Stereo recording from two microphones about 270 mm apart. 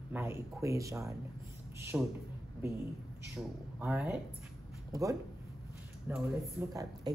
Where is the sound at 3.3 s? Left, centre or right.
Centre.